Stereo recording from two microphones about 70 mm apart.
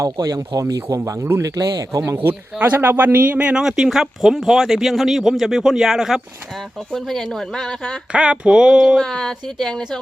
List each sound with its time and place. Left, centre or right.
0.0 s a man's voice: right
2.2 s speech: right
3.3 s a sound: centre
3.6 s speech: centre
8.1 s a sound: centre
9.0 s speech: centre